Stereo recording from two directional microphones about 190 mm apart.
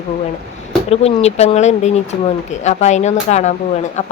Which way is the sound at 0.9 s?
35° left (ahead or behind).